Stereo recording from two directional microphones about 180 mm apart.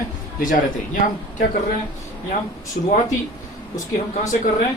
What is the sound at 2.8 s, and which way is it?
Speech, 55° left (ahead or behind).